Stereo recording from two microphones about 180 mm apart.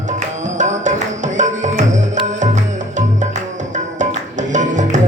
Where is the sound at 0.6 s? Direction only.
40° right (ahead or behind).